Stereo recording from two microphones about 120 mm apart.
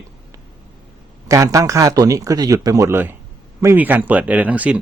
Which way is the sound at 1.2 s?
25° right (ahead or behind).